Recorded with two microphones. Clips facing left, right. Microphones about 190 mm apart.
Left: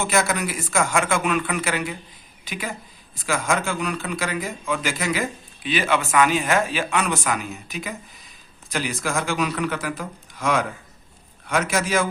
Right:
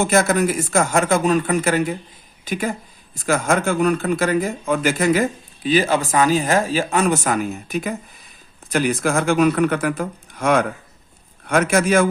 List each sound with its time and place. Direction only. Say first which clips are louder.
0.0 s speech: right 6 dB; 50° right (ahead or behind)